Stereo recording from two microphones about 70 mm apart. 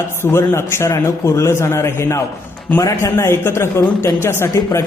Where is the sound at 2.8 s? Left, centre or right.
Left.